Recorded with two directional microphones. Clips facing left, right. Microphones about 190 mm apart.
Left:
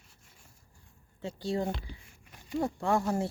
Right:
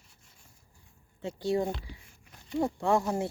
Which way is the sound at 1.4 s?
20° right (ahead or behind).